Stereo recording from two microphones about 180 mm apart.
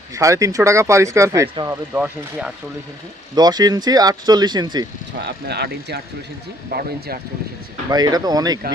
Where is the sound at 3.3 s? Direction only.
20° right (ahead or behind).